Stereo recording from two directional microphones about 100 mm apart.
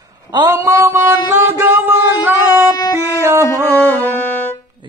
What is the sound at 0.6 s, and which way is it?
Music, 25° right (ahead or behind).